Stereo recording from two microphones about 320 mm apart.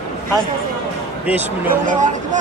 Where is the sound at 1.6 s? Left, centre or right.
Right.